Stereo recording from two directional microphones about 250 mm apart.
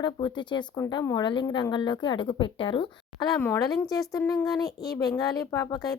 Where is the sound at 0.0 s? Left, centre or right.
Centre.